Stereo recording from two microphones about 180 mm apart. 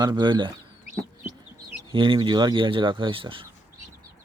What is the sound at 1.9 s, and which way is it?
Speech, 25° right (ahead or behind).